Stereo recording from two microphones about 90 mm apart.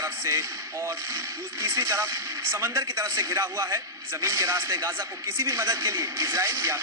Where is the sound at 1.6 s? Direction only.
30° right (ahead or behind).